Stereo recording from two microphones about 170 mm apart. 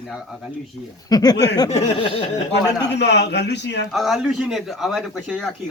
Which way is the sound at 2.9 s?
90° left.